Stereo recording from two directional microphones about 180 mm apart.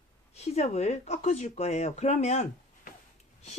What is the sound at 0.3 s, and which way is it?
Speech, 35° left (ahead or behind).